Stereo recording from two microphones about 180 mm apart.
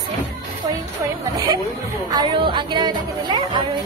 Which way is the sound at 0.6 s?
25° right (ahead or behind).